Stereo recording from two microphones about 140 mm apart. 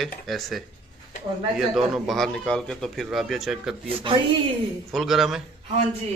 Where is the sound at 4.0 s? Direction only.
35° right (ahead or behind).